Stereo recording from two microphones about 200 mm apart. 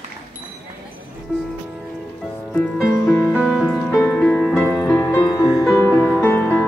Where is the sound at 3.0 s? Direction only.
10° left (ahead or behind).